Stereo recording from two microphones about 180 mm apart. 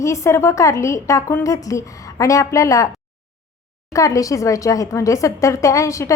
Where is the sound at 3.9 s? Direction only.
15° left (ahead or behind).